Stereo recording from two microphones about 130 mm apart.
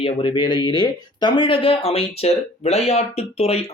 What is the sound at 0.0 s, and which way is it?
Speech, 40° left (ahead or behind).